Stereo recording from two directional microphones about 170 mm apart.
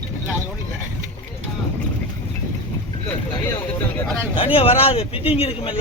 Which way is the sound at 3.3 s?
25° left (ahead or behind).